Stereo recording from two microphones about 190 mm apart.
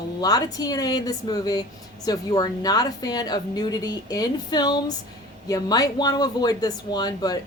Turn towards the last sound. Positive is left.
turn(degrees=20)  # may be behind; listen again after turning